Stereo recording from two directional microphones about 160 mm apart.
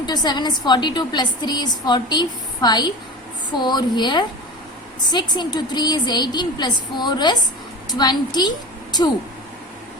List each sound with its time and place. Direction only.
0.0 s a woman's voice: 25° left (ahead or behind)